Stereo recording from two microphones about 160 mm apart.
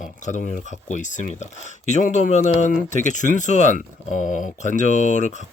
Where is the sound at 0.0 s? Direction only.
50° left (ahead or behind).